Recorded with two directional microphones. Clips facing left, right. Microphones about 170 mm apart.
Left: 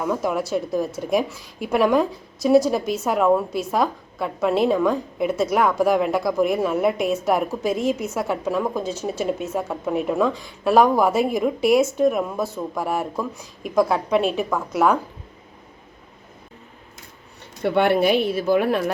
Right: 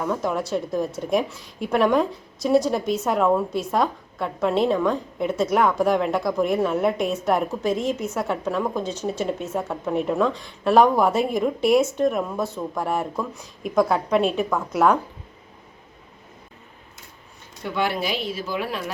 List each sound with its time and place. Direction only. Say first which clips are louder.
0.0 s speech: left 2 dB; 5° left (ahead or behind)
17.6 s speech: left 7 dB; 65° left (ahead or behind)